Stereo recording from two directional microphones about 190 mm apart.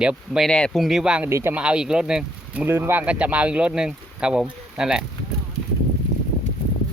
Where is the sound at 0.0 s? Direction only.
5° right (ahead or behind).